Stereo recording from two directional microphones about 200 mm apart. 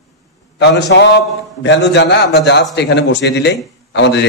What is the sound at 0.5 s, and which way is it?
A man's voice, 60° left (ahead or behind).